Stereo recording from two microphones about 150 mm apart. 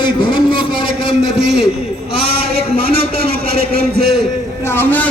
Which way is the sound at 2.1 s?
90° right.